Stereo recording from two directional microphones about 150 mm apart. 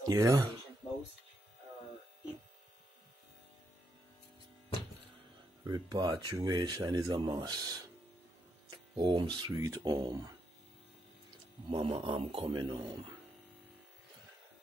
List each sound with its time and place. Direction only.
0.1 s speech: 25° right (ahead or behind)
5.6 s speech: 25° right (ahead or behind)
8.9 s speech: 35° right (ahead or behind)